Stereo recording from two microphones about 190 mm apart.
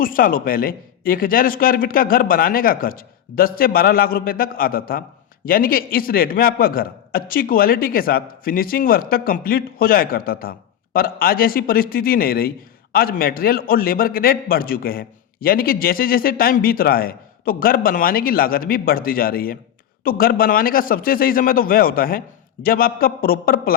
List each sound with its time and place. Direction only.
0.0 s a man's voice: 50° left (ahead or behind)